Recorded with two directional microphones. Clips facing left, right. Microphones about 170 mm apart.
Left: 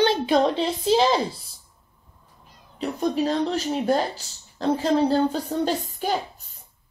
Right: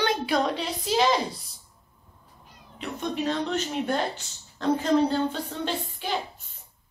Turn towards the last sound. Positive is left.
turn(degrees=40)  # may be behind; listen again after turning